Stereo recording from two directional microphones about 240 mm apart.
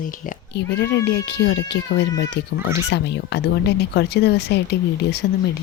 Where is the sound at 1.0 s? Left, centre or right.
Left.